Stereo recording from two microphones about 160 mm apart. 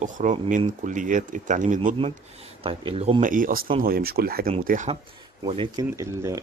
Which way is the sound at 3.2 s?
55° right (ahead or behind).